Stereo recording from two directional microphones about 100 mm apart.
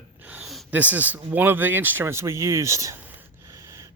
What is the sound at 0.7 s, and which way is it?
Speech, 15° right (ahead or behind).